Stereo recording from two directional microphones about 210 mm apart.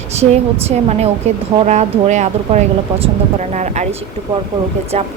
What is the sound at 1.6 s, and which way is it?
Speech, 35° right (ahead or behind).